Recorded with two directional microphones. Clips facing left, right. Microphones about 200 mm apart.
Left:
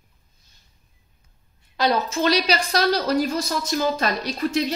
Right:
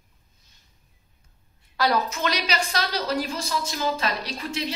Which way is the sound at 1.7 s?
25° left (ahead or behind).